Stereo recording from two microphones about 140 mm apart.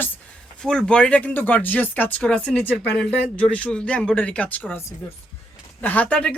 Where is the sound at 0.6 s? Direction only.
5° left (ahead or behind).